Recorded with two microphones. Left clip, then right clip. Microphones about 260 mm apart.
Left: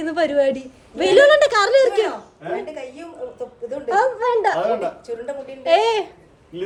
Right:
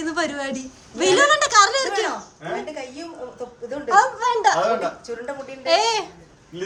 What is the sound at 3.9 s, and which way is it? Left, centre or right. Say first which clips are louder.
Speech: right 1 dB; centre.